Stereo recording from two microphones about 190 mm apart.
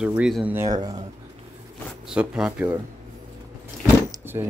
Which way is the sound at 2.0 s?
5° right (ahead or behind).